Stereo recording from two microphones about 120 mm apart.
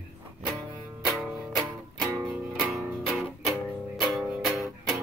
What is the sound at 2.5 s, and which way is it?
Music, centre (ahead or behind).